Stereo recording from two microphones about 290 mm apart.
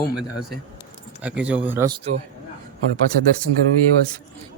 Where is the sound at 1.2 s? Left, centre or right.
Centre.